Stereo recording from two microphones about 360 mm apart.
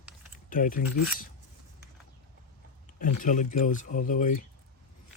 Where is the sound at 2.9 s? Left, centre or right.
Left.